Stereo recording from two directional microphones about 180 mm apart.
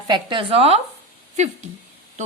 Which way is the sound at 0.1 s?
25° right (ahead or behind).